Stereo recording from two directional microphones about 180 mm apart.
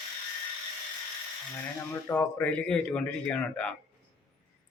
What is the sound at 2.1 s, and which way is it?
Speech, 20° left (ahead or behind).